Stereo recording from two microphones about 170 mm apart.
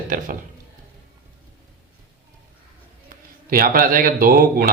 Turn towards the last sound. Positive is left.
turn(degrees=-60)  # may be behind; listen again after turning